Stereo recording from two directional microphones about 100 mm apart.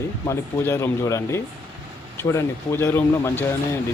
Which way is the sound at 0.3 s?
25° left (ahead or behind).